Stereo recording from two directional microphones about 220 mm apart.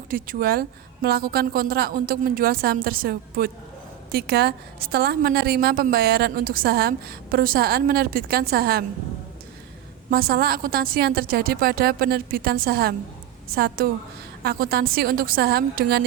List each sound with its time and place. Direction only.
0.1 s a woman's voice: 40° right (ahead or behind)
10.1 s a woman's voice: 40° right (ahead or behind)